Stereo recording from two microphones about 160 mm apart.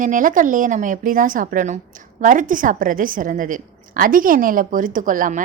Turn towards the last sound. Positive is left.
turn(degrees=-55)  # may be behind; listen again after turning